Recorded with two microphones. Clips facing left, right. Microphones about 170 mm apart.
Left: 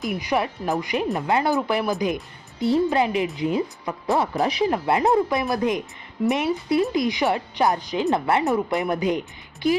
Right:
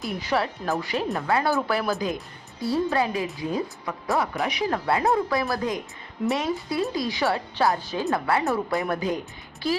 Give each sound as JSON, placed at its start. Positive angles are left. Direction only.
{"t": 0.0, "sound": "speech", "side_deg": 15}